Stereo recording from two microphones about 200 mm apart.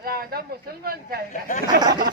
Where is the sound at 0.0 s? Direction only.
50° right (ahead or behind).